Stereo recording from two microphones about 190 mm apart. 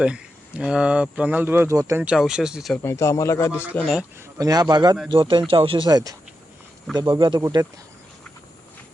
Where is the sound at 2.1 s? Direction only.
5° right (ahead or behind).